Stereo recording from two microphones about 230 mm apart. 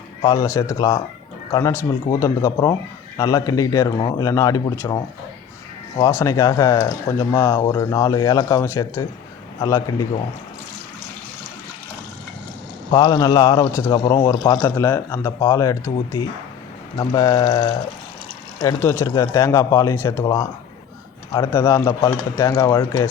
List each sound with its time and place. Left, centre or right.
0.2 s a man's voice: centre
12.9 s a man's voice: centre